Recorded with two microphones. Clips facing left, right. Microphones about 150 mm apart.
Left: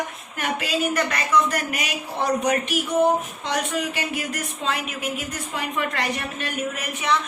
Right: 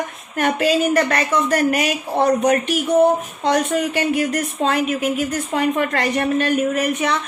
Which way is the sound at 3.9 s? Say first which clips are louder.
Right 9 dB; 50° right (ahead or behind).